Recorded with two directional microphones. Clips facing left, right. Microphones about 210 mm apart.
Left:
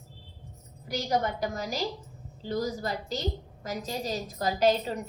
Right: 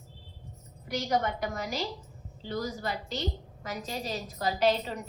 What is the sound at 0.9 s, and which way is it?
A woman's voice, 35° left (ahead or behind).